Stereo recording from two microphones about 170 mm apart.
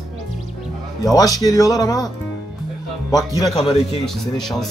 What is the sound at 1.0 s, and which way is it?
Speech, 20° left (ahead or behind).